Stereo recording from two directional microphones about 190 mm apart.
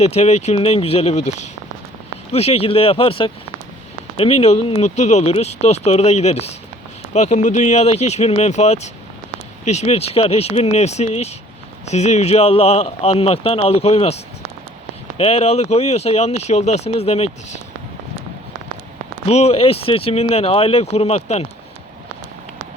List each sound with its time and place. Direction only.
0.0 s speech: 35° left (ahead or behind)
15.2 s speech: 35° left (ahead or behind)
19.2 s speech: 35° left (ahead or behind)